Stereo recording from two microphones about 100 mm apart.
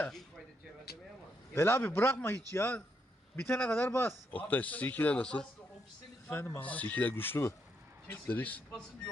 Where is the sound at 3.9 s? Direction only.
25° left (ahead or behind).